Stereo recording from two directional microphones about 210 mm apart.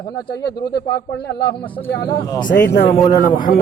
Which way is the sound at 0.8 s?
50° left (ahead or behind).